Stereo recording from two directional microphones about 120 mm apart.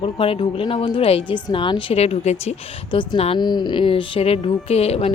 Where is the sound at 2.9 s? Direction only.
50° left (ahead or behind).